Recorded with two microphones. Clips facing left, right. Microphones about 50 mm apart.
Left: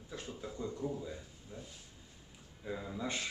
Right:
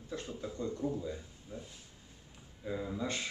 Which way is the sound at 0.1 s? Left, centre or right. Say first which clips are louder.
Right 3 dB; centre.